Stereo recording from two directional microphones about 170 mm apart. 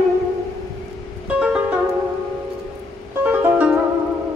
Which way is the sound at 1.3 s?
5° right (ahead or behind).